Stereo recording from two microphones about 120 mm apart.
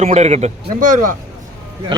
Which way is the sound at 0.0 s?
65° right (ahead or behind).